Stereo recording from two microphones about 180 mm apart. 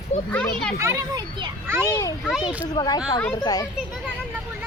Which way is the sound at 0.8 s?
15° right (ahead or behind).